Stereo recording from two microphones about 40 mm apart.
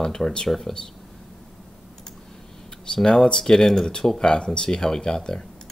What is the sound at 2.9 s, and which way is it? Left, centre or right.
Speech, left.